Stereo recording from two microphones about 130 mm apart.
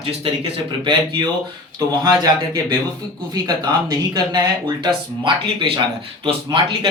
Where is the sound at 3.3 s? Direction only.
30° right (ahead or behind).